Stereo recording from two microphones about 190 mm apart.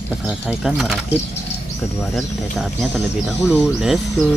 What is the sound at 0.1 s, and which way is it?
Speech, centre (ahead or behind).